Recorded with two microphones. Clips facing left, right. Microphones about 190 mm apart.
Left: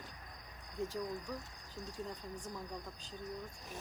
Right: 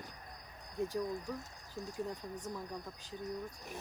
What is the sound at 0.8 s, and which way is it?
Speech, 15° right (ahead or behind).